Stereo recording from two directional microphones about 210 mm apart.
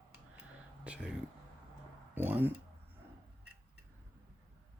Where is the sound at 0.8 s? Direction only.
5° right (ahead or behind).